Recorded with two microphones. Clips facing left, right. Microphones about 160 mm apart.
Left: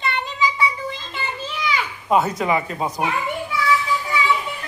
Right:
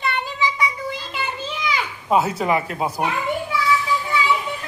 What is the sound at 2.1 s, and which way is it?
Speech, 5° right (ahead or behind).